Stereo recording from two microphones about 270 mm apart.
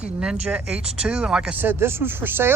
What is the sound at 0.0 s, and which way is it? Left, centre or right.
Speech, centre.